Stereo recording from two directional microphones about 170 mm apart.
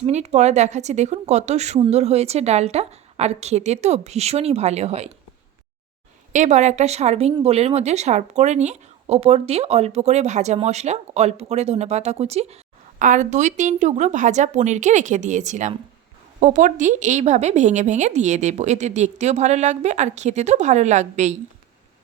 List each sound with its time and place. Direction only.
0.0 s speech: 40° right (ahead or behind)
6.3 s a woman's voice: 45° right (ahead or behind)